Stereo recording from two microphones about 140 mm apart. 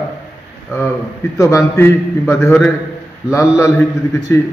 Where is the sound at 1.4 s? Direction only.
20° left (ahead or behind).